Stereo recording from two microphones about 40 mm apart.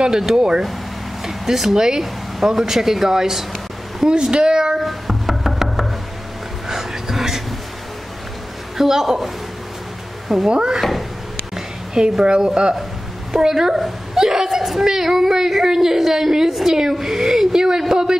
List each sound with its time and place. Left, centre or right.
0.4 s speech: centre
1.2 s speech: centre
4.1 s speech: right
4.8 s knock: centre
6.7 s a sound: centre
8.7 s a woman's voice: centre
10.5 s speech: centre
10.8 s a sound: centre
13.3 s a woman's voice: centre